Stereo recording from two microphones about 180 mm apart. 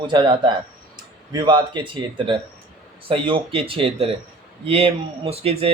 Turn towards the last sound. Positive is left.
turn(degrees=-35)  # may be behind; listen again after turning